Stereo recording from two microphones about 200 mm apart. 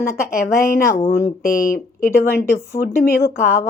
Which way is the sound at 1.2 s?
45° left (ahead or behind).